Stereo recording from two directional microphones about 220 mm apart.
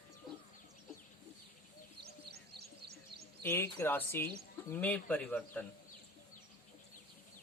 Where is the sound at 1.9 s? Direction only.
45° right (ahead or behind).